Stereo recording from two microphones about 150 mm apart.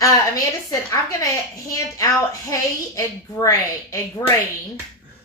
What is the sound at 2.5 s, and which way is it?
A woman's voice, 20° left (ahead or behind).